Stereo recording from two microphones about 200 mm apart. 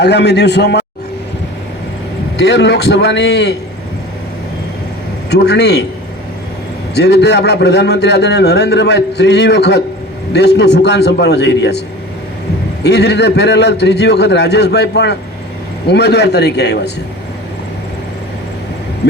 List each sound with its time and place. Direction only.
0.0 s a man's voice: 55° left (ahead or behind)
2.4 s a man's voice: 60° left (ahead or behind)
5.3 s a man's voice: 55° left (ahead or behind)
6.9 s a man's voice: 55° left (ahead or behind)
12.8 s a man's voice: 55° left (ahead or behind)